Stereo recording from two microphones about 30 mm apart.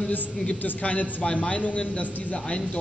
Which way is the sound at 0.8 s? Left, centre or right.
Left.